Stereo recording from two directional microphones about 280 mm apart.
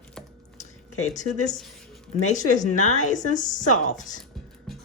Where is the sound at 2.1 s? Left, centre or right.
Left.